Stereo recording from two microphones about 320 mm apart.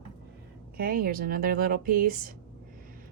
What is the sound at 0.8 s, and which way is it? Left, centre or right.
A woman's voice, right.